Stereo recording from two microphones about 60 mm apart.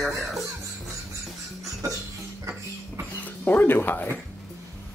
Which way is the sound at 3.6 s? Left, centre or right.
Left.